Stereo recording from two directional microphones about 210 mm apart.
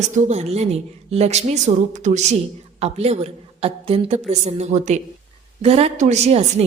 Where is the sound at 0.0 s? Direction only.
35° right (ahead or behind).